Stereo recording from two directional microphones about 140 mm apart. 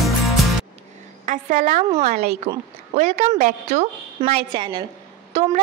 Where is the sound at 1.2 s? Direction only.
70° right (ahead or behind).